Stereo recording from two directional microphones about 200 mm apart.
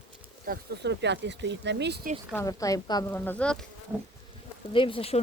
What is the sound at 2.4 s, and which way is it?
Speech, 15° left (ahead or behind).